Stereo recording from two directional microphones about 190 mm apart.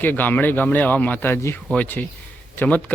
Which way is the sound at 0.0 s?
10° left (ahead or behind).